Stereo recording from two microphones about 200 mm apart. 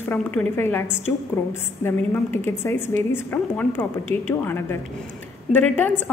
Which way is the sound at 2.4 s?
10° left (ahead or behind).